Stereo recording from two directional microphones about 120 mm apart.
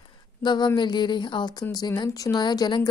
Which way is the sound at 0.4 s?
35° left (ahead or behind).